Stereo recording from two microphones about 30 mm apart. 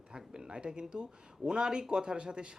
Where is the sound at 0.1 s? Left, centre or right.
Right.